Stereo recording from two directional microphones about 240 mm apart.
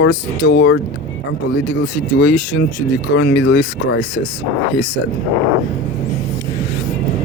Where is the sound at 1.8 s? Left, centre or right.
Left.